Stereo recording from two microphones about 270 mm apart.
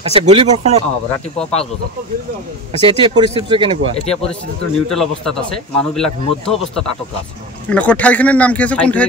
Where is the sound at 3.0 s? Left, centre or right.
Centre.